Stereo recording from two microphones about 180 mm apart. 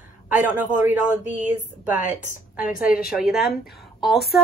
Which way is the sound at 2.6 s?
50° left (ahead or behind).